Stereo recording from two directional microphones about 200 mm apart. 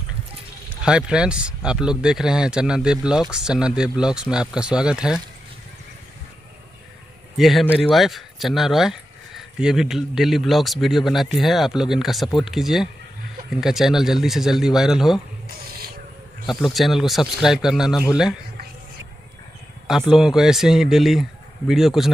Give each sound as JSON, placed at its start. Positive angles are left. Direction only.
{"t": 0.8, "sound": "speech", "side_deg": -5}
{"t": 7.3, "sound": "speech", "side_deg": 0}
{"t": 15.4, "sound": "a sound", "side_deg": -50}
{"t": 16.4, "sound": "speech", "side_deg": 0}
{"t": 19.9, "sound": "speech", "side_deg": 0}